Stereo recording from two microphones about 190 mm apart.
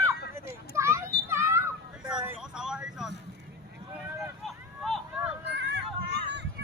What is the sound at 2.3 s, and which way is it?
Vehicle, 5° right (ahead or behind).